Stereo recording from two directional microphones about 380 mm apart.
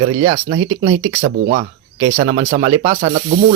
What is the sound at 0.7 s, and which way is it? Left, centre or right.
Speech, right.